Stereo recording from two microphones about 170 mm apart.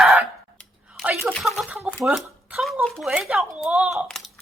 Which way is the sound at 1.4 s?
5° right (ahead or behind).